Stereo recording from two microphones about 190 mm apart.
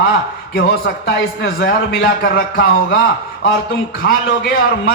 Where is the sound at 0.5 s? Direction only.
55° left (ahead or behind).